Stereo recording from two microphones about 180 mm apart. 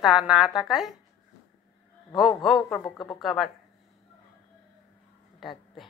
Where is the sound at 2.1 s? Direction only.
Centre (ahead or behind).